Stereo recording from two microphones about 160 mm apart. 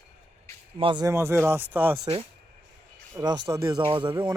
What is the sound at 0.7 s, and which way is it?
Speech, 30° right (ahead or behind).